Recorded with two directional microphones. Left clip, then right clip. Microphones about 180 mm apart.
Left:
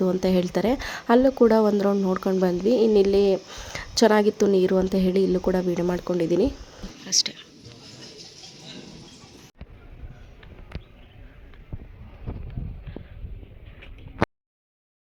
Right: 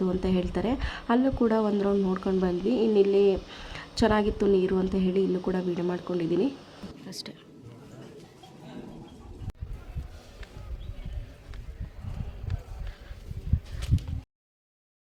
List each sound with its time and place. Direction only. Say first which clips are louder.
0.0 s speech: left 6 dB; 35° left (ahead or behind)
7.0 s speech: left 19 dB; 5° right (ahead or behind)